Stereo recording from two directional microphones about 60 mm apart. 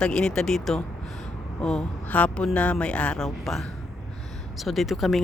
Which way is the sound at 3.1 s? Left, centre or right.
Centre.